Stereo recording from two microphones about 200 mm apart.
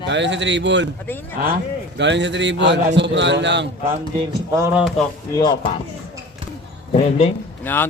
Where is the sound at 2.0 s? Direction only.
60° right (ahead or behind).